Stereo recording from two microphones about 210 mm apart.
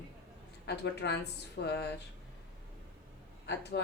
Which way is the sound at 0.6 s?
55° left (ahead or behind).